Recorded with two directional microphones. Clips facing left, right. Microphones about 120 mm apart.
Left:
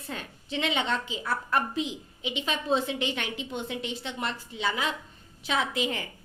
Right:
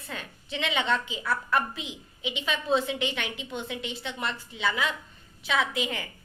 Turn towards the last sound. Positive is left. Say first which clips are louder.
# even
turn(degrees=35)  # may be behind; listen again after turning